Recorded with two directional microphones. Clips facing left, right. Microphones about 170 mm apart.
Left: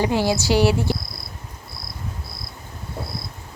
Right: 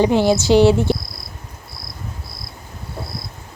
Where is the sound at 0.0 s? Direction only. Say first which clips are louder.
Right 5 dB; 20° right (ahead or behind).